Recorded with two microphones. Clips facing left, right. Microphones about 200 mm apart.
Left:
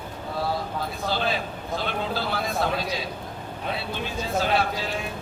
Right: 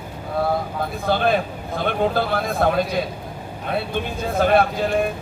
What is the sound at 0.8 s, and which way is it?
Speech, 55° right (ahead or behind).